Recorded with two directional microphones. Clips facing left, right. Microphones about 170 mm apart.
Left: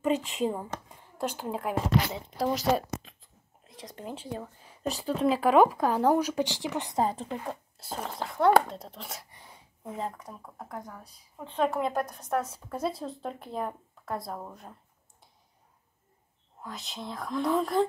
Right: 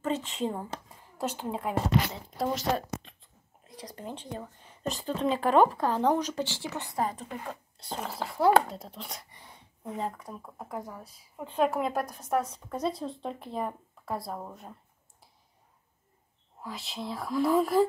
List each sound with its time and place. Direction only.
0.0 s a woman's voice: 15° left (ahead or behind); by 7.3 s 30° left (ahead or behind)
7.7 s speech: 5° left (ahead or behind)
16.6 s speech: centre (ahead or behind)